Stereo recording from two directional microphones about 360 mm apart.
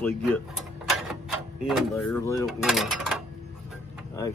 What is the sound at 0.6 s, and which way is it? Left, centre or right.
Mechanisms, centre.